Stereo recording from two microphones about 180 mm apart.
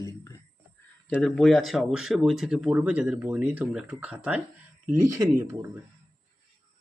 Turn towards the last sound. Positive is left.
turn(degrees=-15)  # may be behind; listen again after turning